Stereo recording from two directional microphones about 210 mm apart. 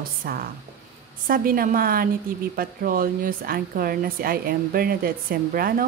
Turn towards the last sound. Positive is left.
turn(degrees=-45)  # may be behind; listen again after turning